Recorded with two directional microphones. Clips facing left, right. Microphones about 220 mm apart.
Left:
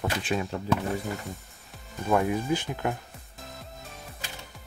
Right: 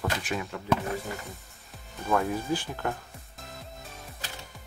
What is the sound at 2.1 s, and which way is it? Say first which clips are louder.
Speech: left 2 dB; 15° left (ahead or behind).